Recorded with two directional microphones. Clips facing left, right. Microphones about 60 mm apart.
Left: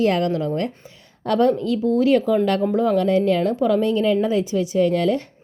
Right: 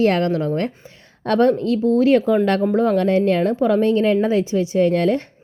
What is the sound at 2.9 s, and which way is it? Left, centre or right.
A woman's voice, right.